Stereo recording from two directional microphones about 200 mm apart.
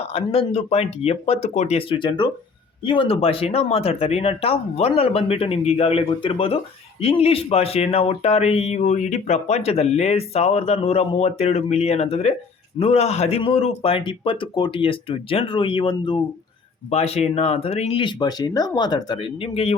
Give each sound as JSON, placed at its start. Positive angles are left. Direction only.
{"t": 0.0, "sound": "speech", "side_deg": 30}